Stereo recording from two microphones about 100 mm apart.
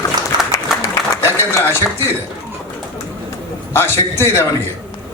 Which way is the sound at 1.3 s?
25° left (ahead or behind).